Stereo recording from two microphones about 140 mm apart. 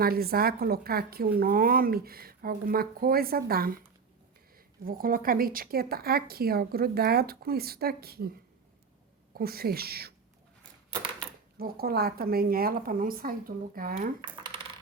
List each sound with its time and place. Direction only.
0.0 s a woman's voice: 90° right
9.3 s a woman's voice: 90° right
11.6 s a woman's voice: 90° right
14.3 s coin: 35° right (ahead or behind)